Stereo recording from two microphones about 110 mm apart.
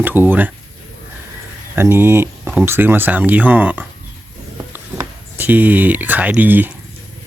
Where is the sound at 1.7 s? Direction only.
20° right (ahead or behind).